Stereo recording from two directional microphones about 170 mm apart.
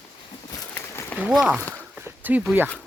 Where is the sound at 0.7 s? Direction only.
15° left (ahead or behind).